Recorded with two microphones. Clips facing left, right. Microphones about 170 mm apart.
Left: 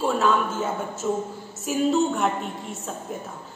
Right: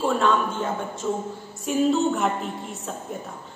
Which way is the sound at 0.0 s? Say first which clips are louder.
Even; 5° left (ahead or behind).